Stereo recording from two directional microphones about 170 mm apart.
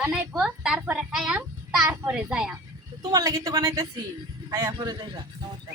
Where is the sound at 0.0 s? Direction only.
5° right (ahead or behind).